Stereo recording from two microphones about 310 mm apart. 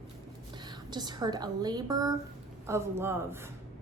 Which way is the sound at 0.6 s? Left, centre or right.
Centre.